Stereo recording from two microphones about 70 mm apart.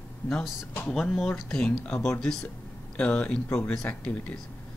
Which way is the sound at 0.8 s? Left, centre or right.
Centre.